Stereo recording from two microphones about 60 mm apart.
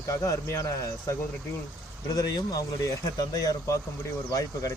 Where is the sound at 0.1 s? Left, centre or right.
Left.